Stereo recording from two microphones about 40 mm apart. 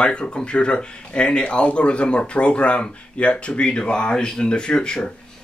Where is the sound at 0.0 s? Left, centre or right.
Left.